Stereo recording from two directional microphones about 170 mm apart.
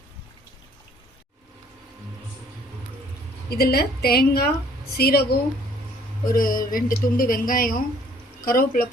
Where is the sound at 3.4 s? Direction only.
65° left (ahead or behind).